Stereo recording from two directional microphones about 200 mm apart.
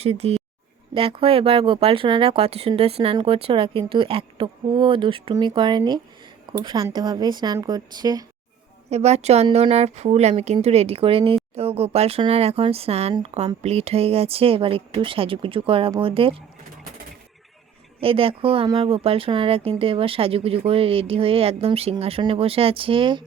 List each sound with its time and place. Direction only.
0.0 s speech: 30° right (ahead or behind)
8.9 s a woman's voice: 35° right (ahead or behind)
18.0 s speech: 30° right (ahead or behind)